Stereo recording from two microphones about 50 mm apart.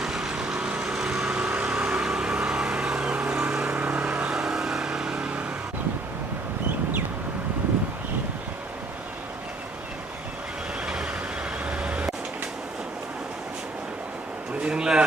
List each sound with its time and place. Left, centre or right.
0.0 s vehicle: centre
1.9 s vehicle: centre
3.8 s vehicle: right
4.3 s vehicle: centre
10.8 s vehicle: centre
14.6 s a sound: centre